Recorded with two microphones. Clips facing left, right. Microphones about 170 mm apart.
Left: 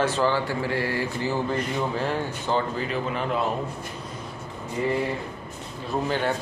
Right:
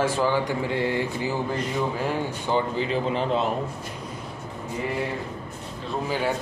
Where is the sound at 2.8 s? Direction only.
30° right (ahead or behind).